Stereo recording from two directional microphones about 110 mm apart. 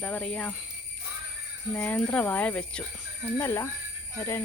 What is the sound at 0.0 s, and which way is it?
Speech, 15° left (ahead or behind).